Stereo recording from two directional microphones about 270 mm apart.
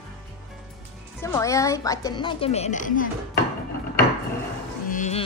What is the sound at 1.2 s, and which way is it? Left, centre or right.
A woman's voice, centre.